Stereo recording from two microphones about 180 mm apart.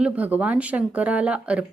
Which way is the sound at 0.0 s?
10° right (ahead or behind).